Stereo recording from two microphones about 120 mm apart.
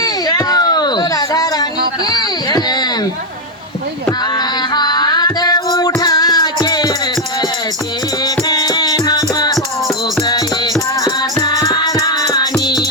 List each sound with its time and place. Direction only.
0.0 s a sound: 30° left (ahead or behind)
4.4 s music: 35° left (ahead or behind)
8.2 s rattle: 35° left (ahead or behind)
10.2 s music: 30° left (ahead or behind)